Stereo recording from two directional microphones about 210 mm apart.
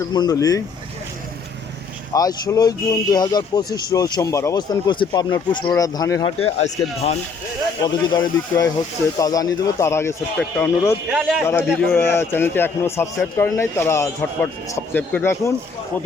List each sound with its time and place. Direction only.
0.1 s a man's voice: 20° left (ahead or behind)
2.1 s a man's voice: 15° left (ahead or behind)
6.4 s a man's voice: 30° left (ahead or behind); by 10.9 s 10° left (ahead or behind)
11.1 s a man's voice: centre (ahead or behind)
11.4 s a man's voice: 10° left (ahead or behind)